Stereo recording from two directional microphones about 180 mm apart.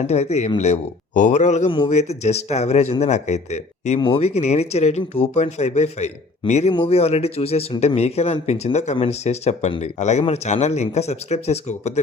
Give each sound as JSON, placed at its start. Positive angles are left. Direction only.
{"t": 0.1, "sound": "speech", "side_deg": 35}